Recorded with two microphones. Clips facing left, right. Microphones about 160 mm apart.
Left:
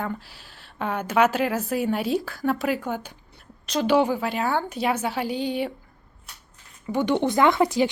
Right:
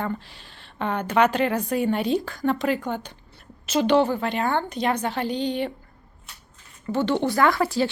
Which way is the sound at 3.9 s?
10° left (ahead or behind).